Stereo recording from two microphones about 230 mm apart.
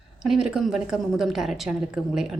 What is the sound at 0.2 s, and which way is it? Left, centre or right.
Speech, centre.